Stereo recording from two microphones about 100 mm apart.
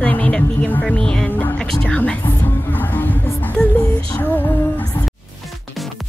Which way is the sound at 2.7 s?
15° left (ahead or behind).